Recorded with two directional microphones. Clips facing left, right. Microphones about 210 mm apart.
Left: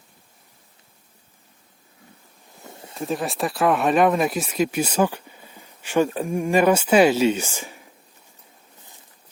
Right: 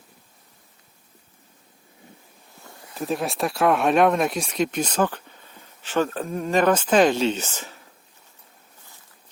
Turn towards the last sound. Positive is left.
turn(degrees=10)  # may be behind; listen again after turning